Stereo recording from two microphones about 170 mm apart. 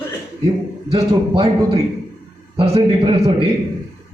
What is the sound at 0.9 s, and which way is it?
A man's voice, 35° right (ahead or behind).